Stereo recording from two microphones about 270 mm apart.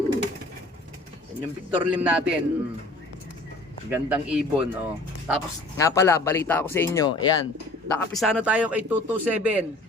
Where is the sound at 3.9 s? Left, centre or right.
Centre.